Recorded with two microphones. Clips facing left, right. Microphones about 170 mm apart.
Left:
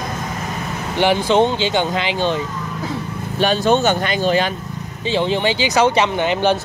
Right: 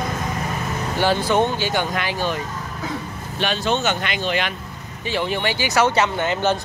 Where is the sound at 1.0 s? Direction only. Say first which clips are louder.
Left 4 dB; 20° left (ahead or behind).